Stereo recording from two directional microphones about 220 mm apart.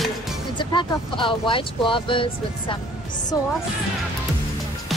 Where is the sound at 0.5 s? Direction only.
20° left (ahead or behind).